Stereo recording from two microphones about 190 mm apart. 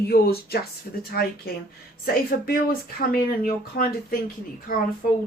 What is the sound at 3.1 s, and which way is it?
A woman's voice, 50° left (ahead or behind).